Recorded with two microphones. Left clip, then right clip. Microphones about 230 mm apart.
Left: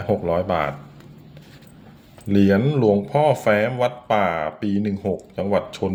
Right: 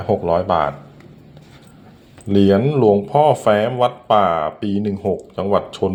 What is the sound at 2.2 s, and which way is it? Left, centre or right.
Speech, centre.